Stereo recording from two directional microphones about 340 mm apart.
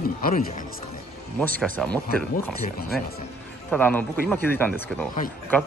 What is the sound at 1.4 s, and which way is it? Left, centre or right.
Speech, centre.